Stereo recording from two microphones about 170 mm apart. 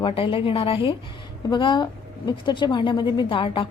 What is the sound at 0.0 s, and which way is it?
A woman's voice, 30° left (ahead or behind).